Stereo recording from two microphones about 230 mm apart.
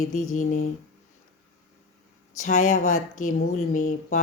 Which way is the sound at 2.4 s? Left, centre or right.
Left.